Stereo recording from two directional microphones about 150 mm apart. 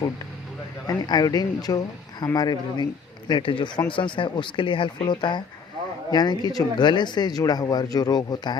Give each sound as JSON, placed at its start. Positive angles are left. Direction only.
{"t": 0.9, "sound": "speech", "side_deg": 25}